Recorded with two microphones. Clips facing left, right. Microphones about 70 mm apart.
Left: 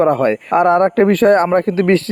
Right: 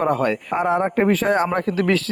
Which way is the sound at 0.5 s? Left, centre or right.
Left.